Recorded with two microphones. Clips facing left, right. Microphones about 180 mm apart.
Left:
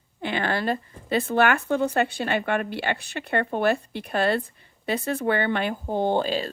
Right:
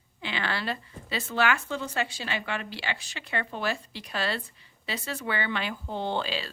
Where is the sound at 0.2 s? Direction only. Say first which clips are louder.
Left 6 dB; 50° left (ahead or behind).